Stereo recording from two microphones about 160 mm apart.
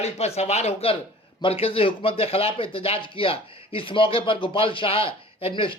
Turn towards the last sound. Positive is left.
turn(degrees=35)  # may be behind; listen again after turning